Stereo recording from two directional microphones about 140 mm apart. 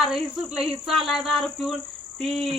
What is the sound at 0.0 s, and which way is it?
A man's voice, centre (ahead or behind).